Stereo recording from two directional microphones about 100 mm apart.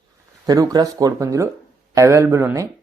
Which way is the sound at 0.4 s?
40° right (ahead or behind).